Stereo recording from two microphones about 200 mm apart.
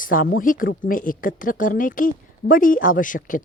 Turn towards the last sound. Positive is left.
turn(degrees=40)  # may be behind; listen again after turning